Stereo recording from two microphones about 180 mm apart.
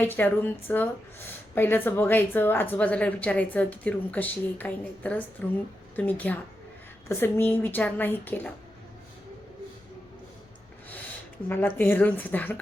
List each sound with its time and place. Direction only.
0.0 s speech: 10° left (ahead or behind)
11.4 s speech: 10° left (ahead or behind)